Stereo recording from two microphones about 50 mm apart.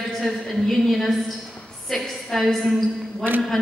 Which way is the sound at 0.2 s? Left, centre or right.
Centre.